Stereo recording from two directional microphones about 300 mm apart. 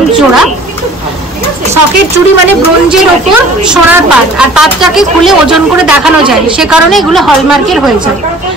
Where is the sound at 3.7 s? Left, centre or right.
Centre.